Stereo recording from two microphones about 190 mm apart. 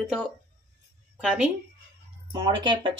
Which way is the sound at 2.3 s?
25° right (ahead or behind).